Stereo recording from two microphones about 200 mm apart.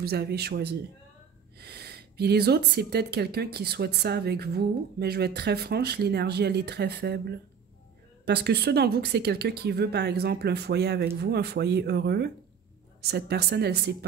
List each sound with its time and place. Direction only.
0.0 s speech: 55° right (ahead or behind)